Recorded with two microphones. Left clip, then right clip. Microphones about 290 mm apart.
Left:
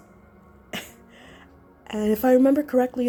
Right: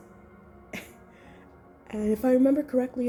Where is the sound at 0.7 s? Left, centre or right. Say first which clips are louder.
Left 6 dB; left.